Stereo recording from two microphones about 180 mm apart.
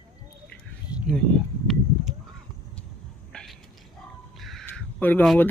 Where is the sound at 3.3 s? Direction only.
5° left (ahead or behind).